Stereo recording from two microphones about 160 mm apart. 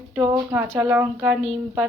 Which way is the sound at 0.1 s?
15° right (ahead or behind).